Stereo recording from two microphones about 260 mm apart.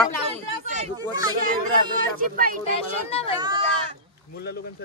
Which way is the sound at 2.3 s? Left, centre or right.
Right.